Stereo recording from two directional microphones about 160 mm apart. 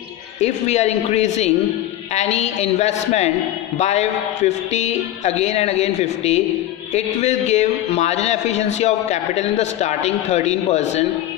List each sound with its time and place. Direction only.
0.4 s a man's voice: 45° left (ahead or behind)